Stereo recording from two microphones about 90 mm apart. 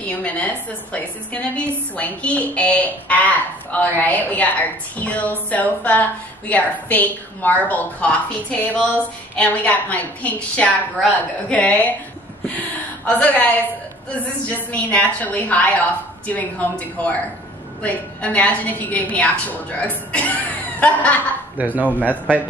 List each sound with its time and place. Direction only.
0.0 s a woman's voice: 15° left (ahead or behind)
13.0 s a woman's voice: 15° left (ahead or behind)
21.6 s speech: 20° right (ahead or behind)
22.1 s a woman's voice: 15° left (ahead or behind)